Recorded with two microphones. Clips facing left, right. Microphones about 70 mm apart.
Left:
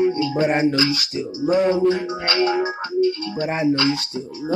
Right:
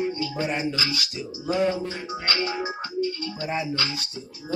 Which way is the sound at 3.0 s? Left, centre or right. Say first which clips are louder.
Left 9 dB; left.